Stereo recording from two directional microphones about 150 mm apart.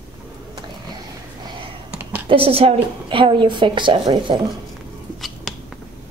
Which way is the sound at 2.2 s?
35° right (ahead or behind).